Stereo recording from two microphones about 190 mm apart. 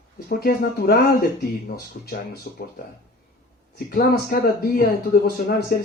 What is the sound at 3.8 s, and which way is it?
Speech, 50° left (ahead or behind).